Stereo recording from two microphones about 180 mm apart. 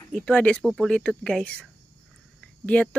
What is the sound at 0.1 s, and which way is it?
Speech, 5° left (ahead or behind).